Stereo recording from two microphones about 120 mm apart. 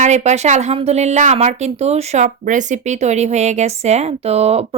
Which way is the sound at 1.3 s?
65° right (ahead or behind).